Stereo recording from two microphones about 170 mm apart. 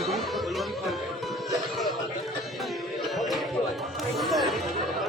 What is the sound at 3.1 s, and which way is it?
Music, centre (ahead or behind).